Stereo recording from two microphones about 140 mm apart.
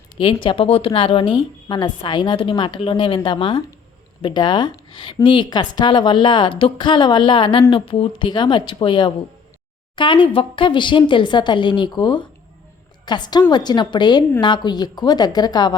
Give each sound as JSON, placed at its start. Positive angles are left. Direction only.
{"t": 0.2, "sound": "speech", "side_deg": 35}